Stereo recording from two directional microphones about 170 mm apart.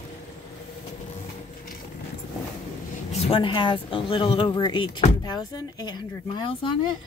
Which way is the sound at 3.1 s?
35° left (ahead or behind).